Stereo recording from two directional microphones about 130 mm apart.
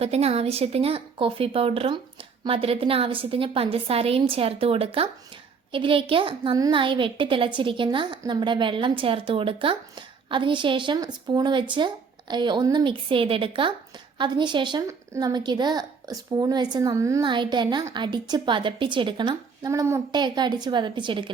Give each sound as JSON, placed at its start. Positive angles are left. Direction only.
{"t": 0.0, "sound": "a woman's voice", "side_deg": -50}
{"t": 14.8, "sound": "a woman's voice", "side_deg": -25}
{"t": 17.2, "sound": "a woman's voice", "side_deg": -35}